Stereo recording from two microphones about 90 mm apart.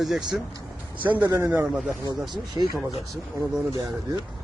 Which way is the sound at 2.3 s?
55° right (ahead or behind).